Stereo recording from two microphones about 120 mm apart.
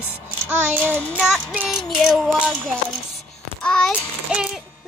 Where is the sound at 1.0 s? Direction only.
5° left (ahead or behind).